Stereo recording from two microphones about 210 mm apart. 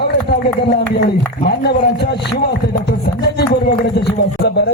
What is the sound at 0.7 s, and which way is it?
A man's voice, 55° left (ahead or behind).